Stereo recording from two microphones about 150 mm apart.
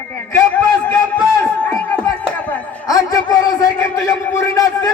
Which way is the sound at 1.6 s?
10° left (ahead or behind).